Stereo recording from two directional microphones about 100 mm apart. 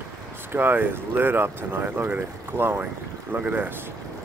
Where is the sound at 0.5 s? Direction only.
20° right (ahead or behind).